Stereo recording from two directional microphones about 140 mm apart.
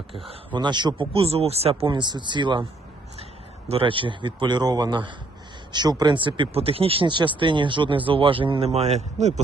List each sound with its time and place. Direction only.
0.3 s speech: 35° right (ahead or behind)
1.9 s speech: 35° right (ahead or behind)
3.7 s speech: 40° right (ahead or behind); by 9.4 s 55° right (ahead or behind)